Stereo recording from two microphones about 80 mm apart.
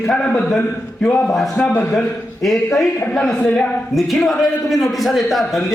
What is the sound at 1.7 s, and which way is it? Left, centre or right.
Speech, left.